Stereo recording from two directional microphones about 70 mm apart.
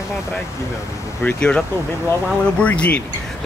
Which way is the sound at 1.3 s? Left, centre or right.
Centre.